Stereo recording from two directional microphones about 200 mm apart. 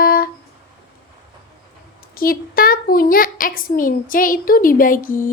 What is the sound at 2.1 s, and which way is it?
A child's voice, 45° left (ahead or behind).